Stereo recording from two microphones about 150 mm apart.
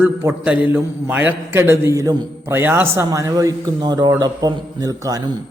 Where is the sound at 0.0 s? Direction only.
15° right (ahead or behind).